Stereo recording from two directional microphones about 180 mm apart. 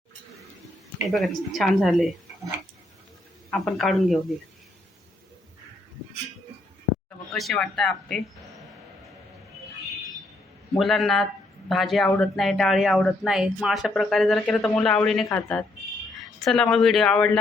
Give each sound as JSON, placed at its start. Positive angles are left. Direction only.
{"t": 1.0, "sound": "speech", "side_deg": 0}
{"t": 3.5, "sound": "speech", "side_deg": 0}
{"t": 7.3, "sound": "speech", "side_deg": 0}
{"t": 10.8, "sound": "speech", "side_deg": 0}